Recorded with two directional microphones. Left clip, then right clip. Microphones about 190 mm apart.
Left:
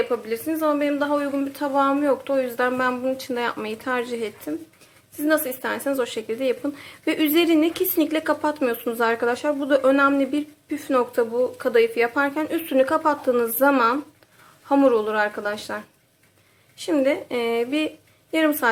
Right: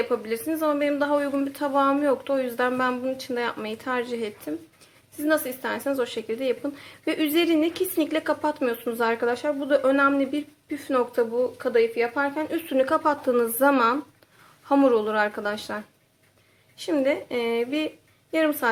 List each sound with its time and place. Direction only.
0.0 s a woman's voice: centre (ahead or behind)